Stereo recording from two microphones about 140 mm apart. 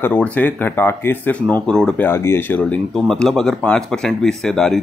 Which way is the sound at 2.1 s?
15° left (ahead or behind).